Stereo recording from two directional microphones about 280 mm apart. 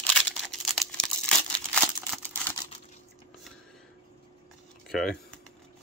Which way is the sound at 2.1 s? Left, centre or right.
Centre.